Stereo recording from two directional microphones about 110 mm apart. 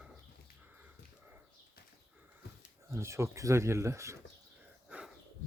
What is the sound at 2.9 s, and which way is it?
Speech, 25° right (ahead or behind).